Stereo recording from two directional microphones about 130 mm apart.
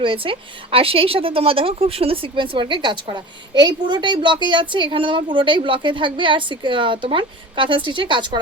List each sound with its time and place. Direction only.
0.0 s a woman's voice: 40° right (ahead or behind)